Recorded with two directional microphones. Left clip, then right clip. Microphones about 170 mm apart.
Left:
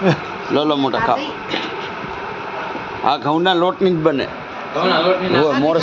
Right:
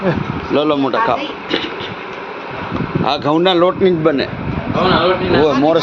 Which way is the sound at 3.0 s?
Centre (ahead or behind).